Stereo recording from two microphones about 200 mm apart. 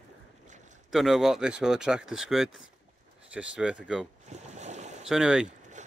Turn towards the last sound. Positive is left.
turn(degrees=-5)  # may be behind; listen again after turning